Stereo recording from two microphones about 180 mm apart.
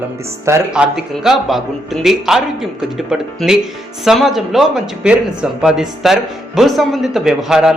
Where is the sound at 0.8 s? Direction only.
Centre (ahead or behind).